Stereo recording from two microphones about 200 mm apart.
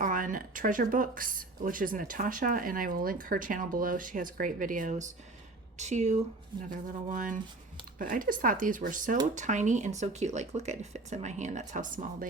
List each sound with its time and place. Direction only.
0.0 s speech: 40° right (ahead or behind)